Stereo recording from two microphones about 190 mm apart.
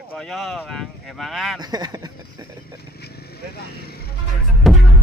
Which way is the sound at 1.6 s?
20° right (ahead or behind).